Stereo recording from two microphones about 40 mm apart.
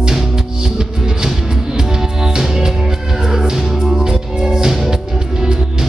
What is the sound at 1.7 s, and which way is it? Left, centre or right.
Music, centre.